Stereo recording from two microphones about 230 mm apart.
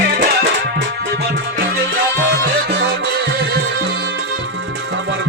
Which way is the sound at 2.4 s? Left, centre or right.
Right.